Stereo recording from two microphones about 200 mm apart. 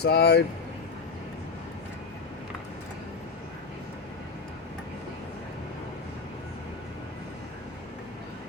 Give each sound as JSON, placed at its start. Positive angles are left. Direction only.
{"t": 0.0, "sound": "speech", "side_deg": 55}